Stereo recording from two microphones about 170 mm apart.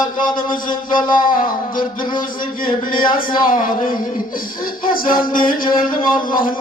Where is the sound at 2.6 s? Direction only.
55° left (ahead or behind).